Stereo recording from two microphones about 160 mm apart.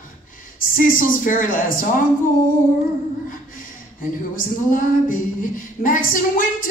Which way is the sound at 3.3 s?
60° left (ahead or behind).